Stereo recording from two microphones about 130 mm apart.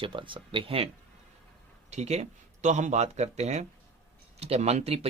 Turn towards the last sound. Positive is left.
turn(degrees=-50)  # may be behind; listen again after turning